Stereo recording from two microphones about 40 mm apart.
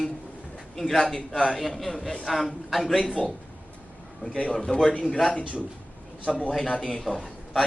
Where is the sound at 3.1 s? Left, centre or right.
Left.